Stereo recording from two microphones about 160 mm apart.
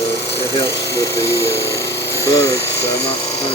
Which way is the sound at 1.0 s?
20° left (ahead or behind).